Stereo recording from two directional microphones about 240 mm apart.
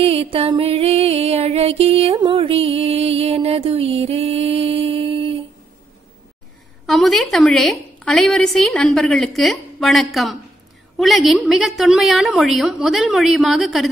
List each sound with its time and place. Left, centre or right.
0.0 s music: right
6.9 s a woman's voice: centre